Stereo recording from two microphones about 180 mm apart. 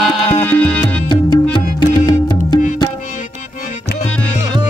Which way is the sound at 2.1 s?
25° left (ahead or behind).